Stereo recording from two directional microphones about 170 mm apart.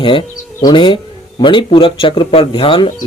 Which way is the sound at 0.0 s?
30° left (ahead or behind).